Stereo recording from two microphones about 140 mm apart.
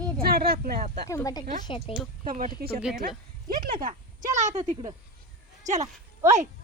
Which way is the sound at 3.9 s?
60° right (ahead or behind).